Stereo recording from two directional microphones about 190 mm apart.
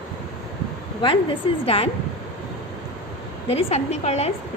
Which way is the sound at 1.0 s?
25° left (ahead or behind).